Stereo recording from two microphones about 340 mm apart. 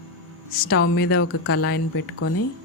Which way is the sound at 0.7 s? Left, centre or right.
Left.